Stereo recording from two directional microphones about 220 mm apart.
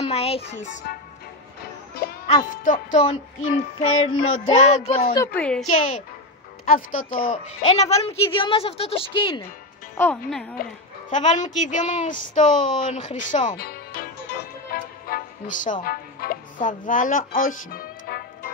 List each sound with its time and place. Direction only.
0.0 s a woman's voice: 25° left (ahead or behind)
2.2 s a woman's voice: 30° left (ahead or behind)
5.1 s a woman's voice: 10° left (ahead or behind)
6.6 s a woman's voice: 40° left (ahead or behind); by 9.4 s 25° left (ahead or behind)
9.9 s speech: 10° left (ahead or behind)
10.6 s a woman's voice: 35° left (ahead or behind)
13.5 s music: 40° left (ahead or behind)
15.6 s speech: 40° left (ahead or behind)